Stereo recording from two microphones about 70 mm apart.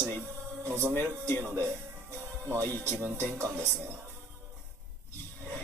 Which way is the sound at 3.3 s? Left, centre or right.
Right.